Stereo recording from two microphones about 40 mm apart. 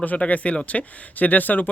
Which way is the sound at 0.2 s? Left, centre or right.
Left.